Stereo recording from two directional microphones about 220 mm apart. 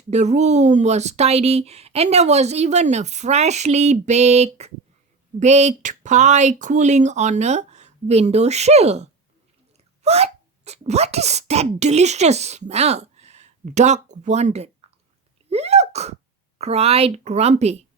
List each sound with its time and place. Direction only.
0.1 s speech: 30° right (ahead or behind)
15.4 s sneeze: 30° right (ahead or behind)
16.6 s a woman's voice: 30° right (ahead or behind)